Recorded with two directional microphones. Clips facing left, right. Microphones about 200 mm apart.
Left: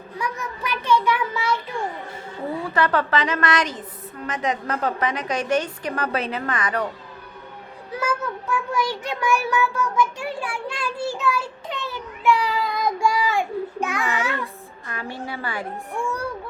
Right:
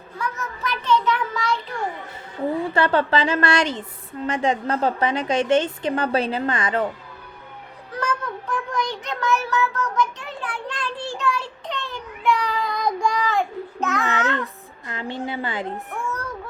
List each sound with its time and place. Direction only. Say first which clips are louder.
0.2 s child singing: even; 10° left (ahead or behind)
2.7 s a woman's voice: even; 30° right (ahead or behind)
7.9 s child singing: left 1 dB; 5° left (ahead or behind)
14.8 s a woman's voice: right 3 dB; 20° right (ahead or behind)